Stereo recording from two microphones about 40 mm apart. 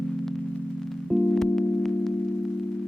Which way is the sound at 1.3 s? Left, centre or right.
Centre.